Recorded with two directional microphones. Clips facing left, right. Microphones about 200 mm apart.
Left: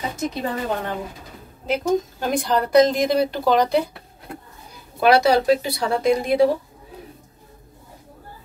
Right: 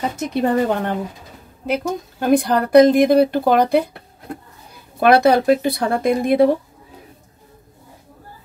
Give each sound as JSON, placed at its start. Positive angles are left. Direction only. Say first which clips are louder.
{"t": 0.3, "sound": "a woman's voice", "louder": "right 8 dB", "side_deg": -60}
{"t": 5.0, "sound": "speech", "louder": "right 3 dB", "side_deg": -55}